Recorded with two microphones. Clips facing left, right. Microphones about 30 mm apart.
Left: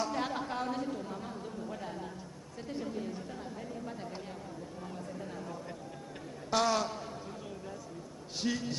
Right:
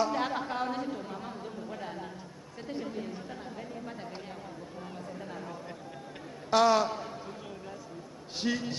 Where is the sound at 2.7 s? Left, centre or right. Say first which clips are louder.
Right 1 dB; centre.